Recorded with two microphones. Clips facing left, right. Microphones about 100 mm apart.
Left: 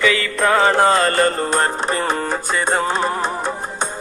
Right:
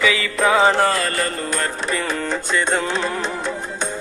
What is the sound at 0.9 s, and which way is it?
Music, 35° left (ahead or behind).